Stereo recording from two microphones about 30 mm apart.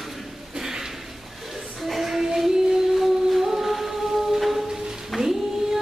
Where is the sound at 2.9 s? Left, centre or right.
Centre.